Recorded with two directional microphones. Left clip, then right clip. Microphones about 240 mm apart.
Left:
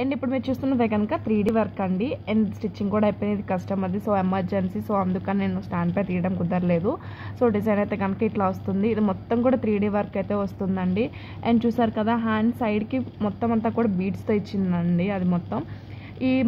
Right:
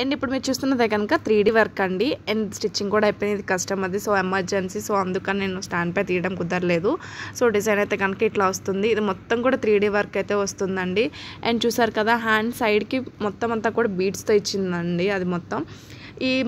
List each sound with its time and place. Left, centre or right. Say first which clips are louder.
0.0 s a woman's voice: right 2 dB; right